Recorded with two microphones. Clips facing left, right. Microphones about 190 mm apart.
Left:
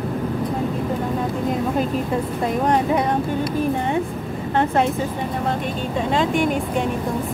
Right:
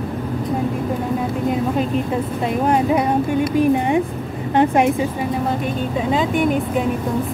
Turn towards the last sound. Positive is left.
turn(degrees=0)  # may be behind; listen again after turning